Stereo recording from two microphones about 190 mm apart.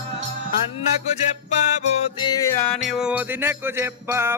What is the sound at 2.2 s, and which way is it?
Music, 20° left (ahead or behind).